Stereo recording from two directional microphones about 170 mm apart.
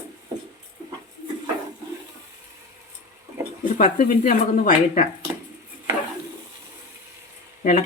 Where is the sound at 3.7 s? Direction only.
45° left (ahead or behind).